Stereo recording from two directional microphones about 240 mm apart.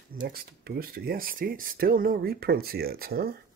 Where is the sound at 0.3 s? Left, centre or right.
Right.